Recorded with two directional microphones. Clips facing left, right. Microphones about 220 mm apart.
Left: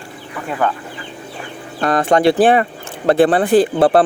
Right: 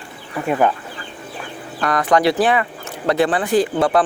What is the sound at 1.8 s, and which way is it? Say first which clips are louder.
Speech: left 3 dB; 25° left (ahead or behind).